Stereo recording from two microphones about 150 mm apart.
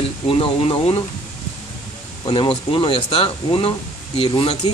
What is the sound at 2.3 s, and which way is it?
Speech, 30° left (ahead or behind).